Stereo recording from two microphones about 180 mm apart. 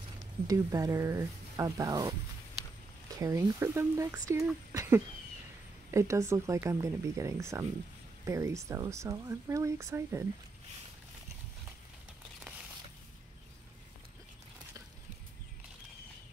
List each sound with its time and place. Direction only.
0.5 s speech: 20° right (ahead or behind)
3.2 s speech: 15° right (ahead or behind)
4.7 s a sound: 15° right (ahead or behind)
5.9 s speech: 15° right (ahead or behind)